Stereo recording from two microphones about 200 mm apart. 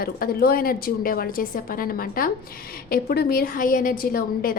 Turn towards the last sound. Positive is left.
turn(degrees=45)  # may be behind; listen again after turning